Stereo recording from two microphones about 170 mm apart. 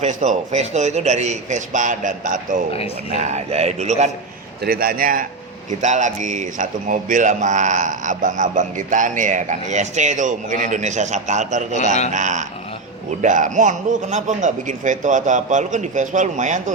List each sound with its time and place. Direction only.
0.0 s a man's voice: 45° right (ahead or behind)
4.6 s a man's voice: 60° right (ahead or behind)
5.8 s speech: 45° right (ahead or behind)